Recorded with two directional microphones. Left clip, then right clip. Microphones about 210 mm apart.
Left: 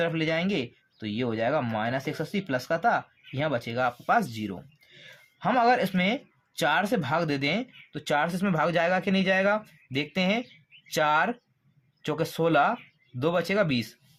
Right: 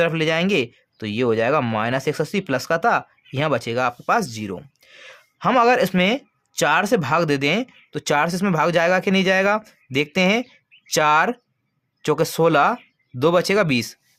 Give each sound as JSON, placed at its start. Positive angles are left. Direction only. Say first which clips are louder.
{"t": 0.0, "sound": "speech", "louder": "right 7 dB", "side_deg": -40}